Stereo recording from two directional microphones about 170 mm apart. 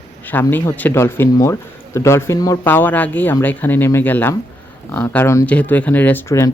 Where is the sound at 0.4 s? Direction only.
10° left (ahead or behind).